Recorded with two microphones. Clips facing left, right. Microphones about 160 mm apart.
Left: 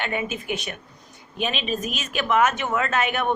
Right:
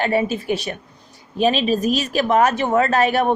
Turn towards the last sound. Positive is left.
turn(degrees=-35)  # may be behind; listen again after turning